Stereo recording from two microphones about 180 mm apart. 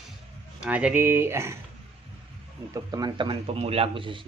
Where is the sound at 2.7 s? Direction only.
20° right (ahead or behind).